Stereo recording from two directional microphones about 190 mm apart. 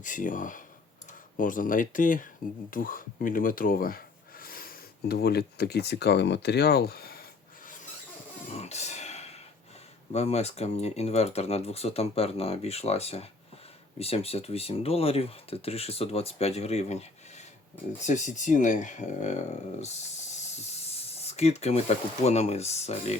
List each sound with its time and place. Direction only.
0.0 s speech: 45° left (ahead or behind)
8.5 s a sound: 35° left (ahead or behind)
10.1 s speech: 35° left (ahead or behind)